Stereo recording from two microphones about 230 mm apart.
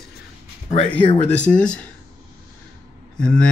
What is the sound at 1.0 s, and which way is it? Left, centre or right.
Speech, left.